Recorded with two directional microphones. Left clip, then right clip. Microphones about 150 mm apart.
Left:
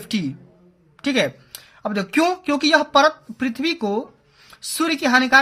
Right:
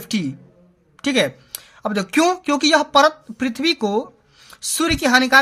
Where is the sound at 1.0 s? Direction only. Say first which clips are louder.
Right 2 dB; 20° right (ahead or behind).